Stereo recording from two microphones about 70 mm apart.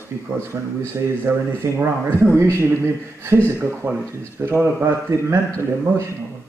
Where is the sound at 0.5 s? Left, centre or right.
Right.